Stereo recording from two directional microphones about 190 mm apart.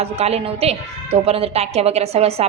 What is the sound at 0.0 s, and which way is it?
A woman's voice, 35° right (ahead or behind).